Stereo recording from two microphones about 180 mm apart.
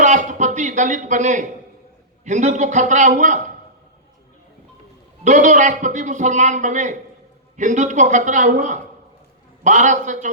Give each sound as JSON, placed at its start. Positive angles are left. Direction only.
{"t": 0.0, "sound": "a sound", "side_deg": -45}
{"t": 2.2, "sound": "a man's voice", "side_deg": -40}
{"t": 5.2, "sound": "a man's voice", "side_deg": -45}